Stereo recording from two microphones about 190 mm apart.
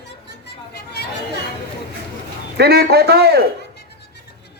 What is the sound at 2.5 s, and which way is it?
Speech, 55° right (ahead or behind).